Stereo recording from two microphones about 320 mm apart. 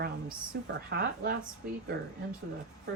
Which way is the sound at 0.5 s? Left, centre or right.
Right.